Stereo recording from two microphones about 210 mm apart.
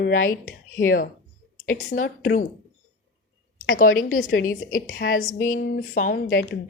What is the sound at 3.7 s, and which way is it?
A woman's voice, 40° left (ahead or behind).